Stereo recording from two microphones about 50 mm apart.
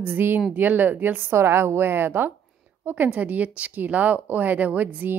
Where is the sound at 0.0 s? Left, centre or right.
Right.